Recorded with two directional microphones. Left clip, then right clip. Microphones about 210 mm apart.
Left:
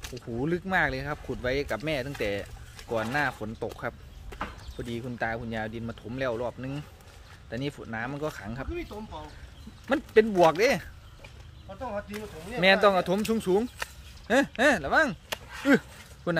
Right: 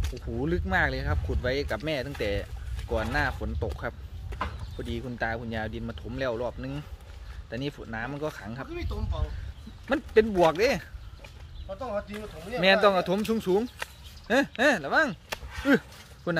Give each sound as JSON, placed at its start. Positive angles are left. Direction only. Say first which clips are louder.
{"t": 0.0, "sound": "speech", "louder": "even", "side_deg": 0}
{"t": 8.6, "sound": "speech", "louder": "left 1 dB", "side_deg": -55}
{"t": 9.8, "sound": "speech", "louder": "left 1 dB", "side_deg": 5}
{"t": 11.7, "sound": "speech", "louder": "right 3 dB", "side_deg": -50}
{"t": 12.5, "sound": "speech", "louder": "even", "side_deg": 5}
{"t": 15.2, "sound": "chop", "louder": "left 1 dB", "side_deg": -5}
{"t": 16.3, "sound": "speech", "louder": "left 1 dB", "side_deg": 10}